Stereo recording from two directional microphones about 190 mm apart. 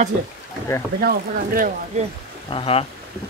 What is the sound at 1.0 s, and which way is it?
Speech, 50° right (ahead or behind).